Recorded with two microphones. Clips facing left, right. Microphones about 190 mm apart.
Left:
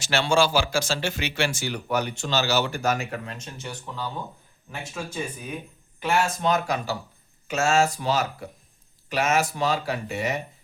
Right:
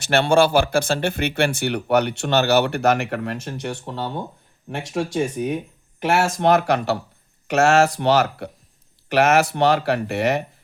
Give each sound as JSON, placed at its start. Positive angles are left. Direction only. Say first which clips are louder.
{"t": 0.0, "sound": "speech", "louder": "right 5 dB", "side_deg": -60}
{"t": 4.7, "sound": "speech", "louder": "right 10 dB", "side_deg": -80}